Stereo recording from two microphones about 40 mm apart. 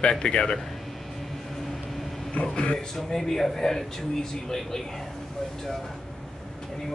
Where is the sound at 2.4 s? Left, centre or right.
Left.